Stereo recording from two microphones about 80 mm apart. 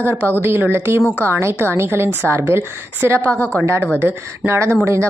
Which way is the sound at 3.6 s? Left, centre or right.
Right.